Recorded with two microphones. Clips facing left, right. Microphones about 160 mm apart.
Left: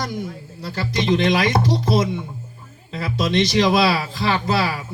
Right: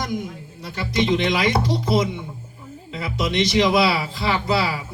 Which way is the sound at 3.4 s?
25° left (ahead or behind).